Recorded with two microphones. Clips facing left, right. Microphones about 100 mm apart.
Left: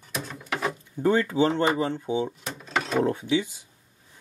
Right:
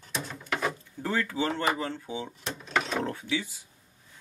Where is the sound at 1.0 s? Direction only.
20° left (ahead or behind).